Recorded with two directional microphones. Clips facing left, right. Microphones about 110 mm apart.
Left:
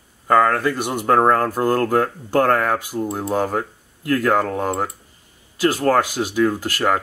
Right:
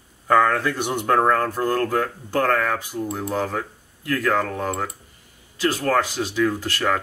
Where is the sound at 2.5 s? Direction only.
30° left (ahead or behind).